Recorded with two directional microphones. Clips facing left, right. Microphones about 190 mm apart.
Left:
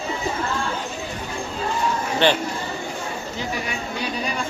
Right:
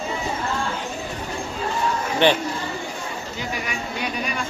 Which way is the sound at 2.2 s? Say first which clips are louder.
Right 1 dB; 15° right (ahead or behind).